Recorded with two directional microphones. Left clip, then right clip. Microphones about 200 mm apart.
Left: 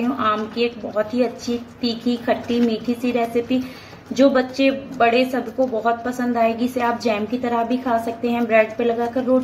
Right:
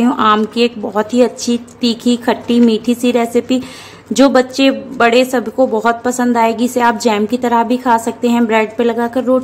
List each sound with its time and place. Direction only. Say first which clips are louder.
0.0 s a woman's voice: right 9 dB; 45° right (ahead or behind)